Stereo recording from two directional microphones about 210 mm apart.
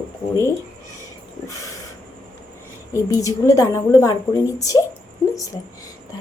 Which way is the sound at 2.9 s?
15° left (ahead or behind).